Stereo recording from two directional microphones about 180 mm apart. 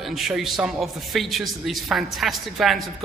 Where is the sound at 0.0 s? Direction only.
Centre (ahead or behind).